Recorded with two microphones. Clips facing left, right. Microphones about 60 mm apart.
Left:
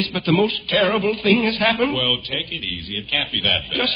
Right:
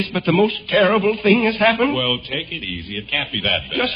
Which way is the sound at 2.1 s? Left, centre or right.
Right.